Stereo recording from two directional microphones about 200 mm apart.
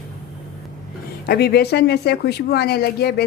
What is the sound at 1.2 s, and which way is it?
Speech, 50° left (ahead or behind).